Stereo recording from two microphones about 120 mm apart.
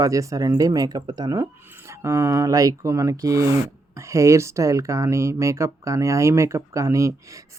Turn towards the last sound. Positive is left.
turn(degrees=-25)  # may be behind; listen again after turning